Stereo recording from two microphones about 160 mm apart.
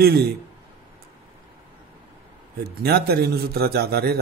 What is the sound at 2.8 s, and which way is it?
Speech, 90° right.